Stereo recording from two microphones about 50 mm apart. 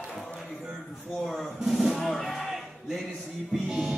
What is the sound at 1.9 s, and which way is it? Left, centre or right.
Music, centre.